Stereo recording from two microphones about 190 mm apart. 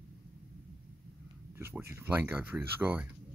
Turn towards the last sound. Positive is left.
turn(degrees=-10)  # may be behind; listen again after turning